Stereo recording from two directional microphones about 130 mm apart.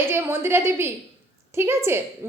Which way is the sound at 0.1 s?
15° right (ahead or behind).